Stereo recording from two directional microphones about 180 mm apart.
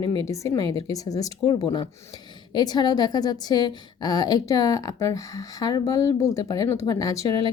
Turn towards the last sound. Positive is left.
turn(degrees=20)  # may be behind; listen again after turning